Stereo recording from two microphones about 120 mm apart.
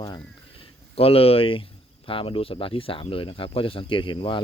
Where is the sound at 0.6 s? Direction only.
55° left (ahead or behind).